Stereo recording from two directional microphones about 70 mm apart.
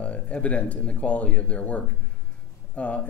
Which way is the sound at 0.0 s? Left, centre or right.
Centre.